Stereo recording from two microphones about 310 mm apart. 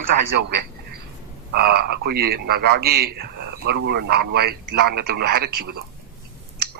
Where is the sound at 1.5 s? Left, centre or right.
Right.